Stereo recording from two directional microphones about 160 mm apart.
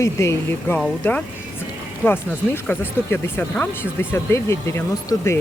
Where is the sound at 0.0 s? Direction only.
20° left (ahead or behind).